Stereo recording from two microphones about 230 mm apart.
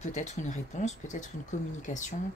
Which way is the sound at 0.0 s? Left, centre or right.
Left.